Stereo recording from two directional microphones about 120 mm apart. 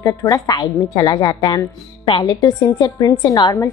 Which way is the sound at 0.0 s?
30° left (ahead or behind).